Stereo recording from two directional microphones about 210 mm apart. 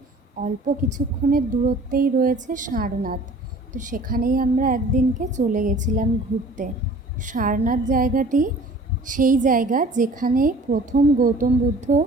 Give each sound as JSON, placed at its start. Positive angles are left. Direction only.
{"t": 0.3, "sound": "a woman's voice", "side_deg": -35}
{"t": 7.2, "sound": "a woman's voice", "side_deg": -40}